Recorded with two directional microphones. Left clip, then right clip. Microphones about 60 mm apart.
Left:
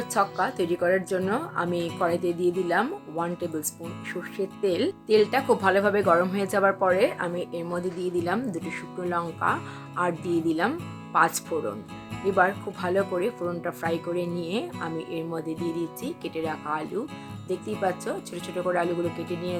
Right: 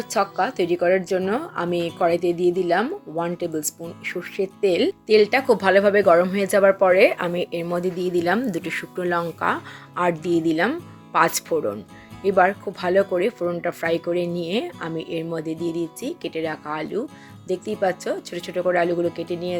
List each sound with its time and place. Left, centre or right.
0.0 s speech: centre; by 6.7 s right
7.0 s speech: right
9.4 s speech: right
12.2 s speech: right